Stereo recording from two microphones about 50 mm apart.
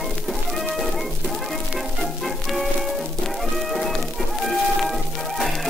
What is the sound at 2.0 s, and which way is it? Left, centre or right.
Music, centre.